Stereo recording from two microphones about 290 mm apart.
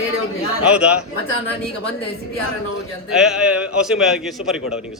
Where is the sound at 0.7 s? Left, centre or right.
Centre.